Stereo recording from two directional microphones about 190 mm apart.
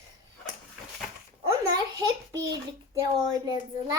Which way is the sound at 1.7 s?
20° right (ahead or behind).